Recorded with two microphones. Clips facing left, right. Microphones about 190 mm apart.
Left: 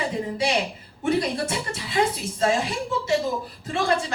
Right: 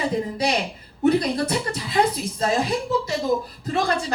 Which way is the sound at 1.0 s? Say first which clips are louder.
Right 4 dB; 40° right (ahead or behind).